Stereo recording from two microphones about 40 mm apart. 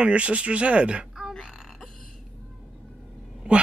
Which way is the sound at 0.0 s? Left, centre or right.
Right.